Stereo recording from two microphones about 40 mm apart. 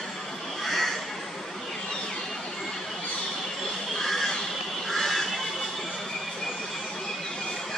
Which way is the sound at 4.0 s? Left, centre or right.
Centre.